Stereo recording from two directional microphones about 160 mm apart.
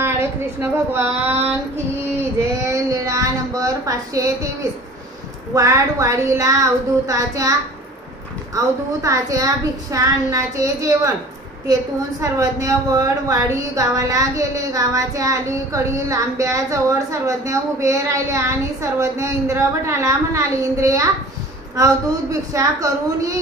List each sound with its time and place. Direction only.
0.0 s a woman's voice: 15° right (ahead or behind)
2.6 s a sound: 20° right (ahead or behind)
5.5 s a woman's voice: 20° right (ahead or behind)
9.0 s a woman's voice: 20° right (ahead or behind)
12.2 s a woman's voice: 20° right (ahead or behind)